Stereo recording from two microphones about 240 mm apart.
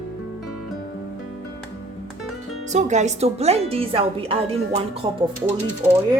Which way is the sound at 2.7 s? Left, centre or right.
Right.